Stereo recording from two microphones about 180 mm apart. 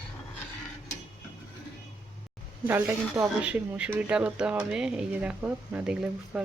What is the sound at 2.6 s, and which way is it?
Speech, 10° right (ahead or behind).